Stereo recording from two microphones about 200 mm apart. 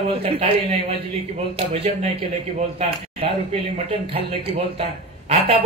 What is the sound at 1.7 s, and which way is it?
Speech, 30° right (ahead or behind).